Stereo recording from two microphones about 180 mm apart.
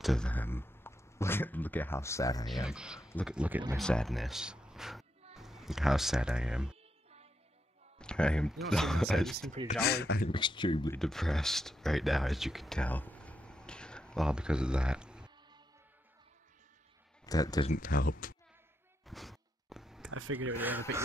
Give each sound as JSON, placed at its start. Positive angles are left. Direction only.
{"t": 0.0, "sound": "speech", "side_deg": 5}
{"t": 2.5, "sound": "speech", "side_deg": -5}
{"t": 3.0, "sound": "speech", "side_deg": 15}
{"t": 3.3, "sound": "speech", "side_deg": -5}
{"t": 3.7, "sound": "speech", "side_deg": 5}
{"t": 8.0, "sound": "speech", "side_deg": 5}
{"t": 9.8, "sound": "speech", "side_deg": 60}
{"t": 10.3, "sound": "speech", "side_deg": 25}
{"t": 11.0, "sound": "speech", "side_deg": 0}
{"t": 17.3, "sound": "speech", "side_deg": 20}
{"t": 17.6, "sound": "speech", "side_deg": 50}
{"t": 19.0, "sound": "a sound", "side_deg": 0}
{"t": 20.3, "sound": "speech", "side_deg": -10}